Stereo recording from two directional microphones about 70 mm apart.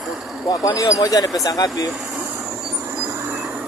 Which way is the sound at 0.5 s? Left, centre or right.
Left.